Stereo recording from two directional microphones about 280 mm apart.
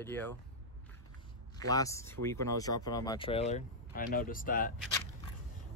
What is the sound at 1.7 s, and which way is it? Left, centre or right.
Speech, centre.